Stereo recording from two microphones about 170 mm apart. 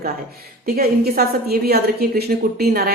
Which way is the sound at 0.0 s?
65° right (ahead or behind).